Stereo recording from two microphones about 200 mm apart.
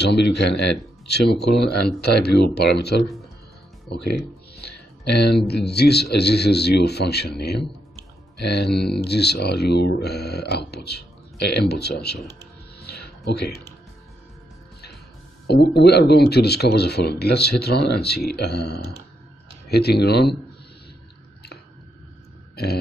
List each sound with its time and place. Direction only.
0.0 s speech: 55° left (ahead or behind)
3.9 s music: 55° left (ahead or behind)
5.7 s speech: 55° left (ahead or behind)
12.8 s a sound: 55° left (ahead or behind)
15.4 s speech: 55° left (ahead or behind)